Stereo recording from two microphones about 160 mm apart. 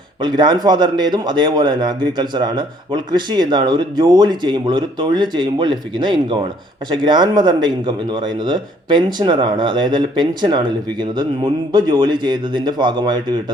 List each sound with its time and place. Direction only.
0.2 s speech: 25° right (ahead or behind)